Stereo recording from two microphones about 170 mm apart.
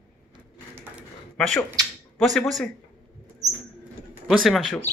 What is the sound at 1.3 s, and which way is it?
Speech, centre (ahead or behind).